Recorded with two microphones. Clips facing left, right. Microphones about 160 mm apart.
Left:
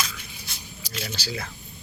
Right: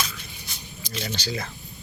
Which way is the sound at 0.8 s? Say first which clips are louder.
Right 3 dB; 5° left (ahead or behind).